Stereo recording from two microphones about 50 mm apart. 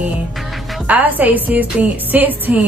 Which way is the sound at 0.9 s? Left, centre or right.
Right.